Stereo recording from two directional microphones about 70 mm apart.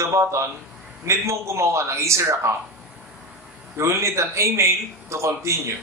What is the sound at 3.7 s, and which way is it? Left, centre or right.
A man's voice, right.